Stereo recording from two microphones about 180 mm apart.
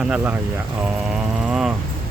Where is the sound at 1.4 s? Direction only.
5° right (ahead or behind).